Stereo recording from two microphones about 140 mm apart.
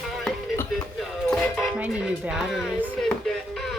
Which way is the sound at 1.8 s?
10° right (ahead or behind).